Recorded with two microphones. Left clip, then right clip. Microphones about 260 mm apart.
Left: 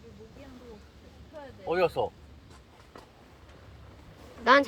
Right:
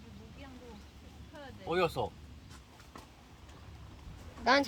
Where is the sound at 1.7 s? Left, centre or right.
Right.